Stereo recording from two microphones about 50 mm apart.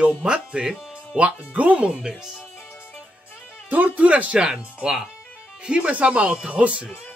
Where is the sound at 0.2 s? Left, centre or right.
Centre.